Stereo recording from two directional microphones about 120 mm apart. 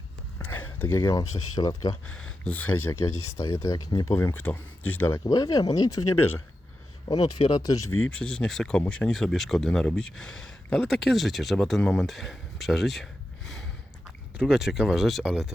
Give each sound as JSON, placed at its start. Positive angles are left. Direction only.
{"t": 0.3, "sound": "speech", "side_deg": 15}
{"t": 2.0, "sound": "speech", "side_deg": 10}
{"t": 3.3, "sound": "speech", "side_deg": 25}
{"t": 5.2, "sound": "speech", "side_deg": 30}
{"t": 8.1, "sound": "speech", "side_deg": 5}